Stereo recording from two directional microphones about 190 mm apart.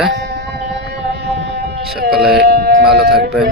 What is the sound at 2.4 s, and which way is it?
Civil defense siren, 60° right (ahead or behind).